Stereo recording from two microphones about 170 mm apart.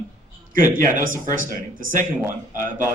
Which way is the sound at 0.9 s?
50° right (ahead or behind).